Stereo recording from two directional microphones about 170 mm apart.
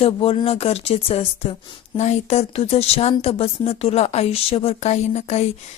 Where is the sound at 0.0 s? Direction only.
35° left (ahead or behind).